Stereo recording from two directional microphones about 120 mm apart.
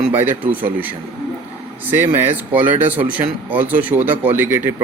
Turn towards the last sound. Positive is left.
turn(degrees=-15)  # may be behind; listen again after turning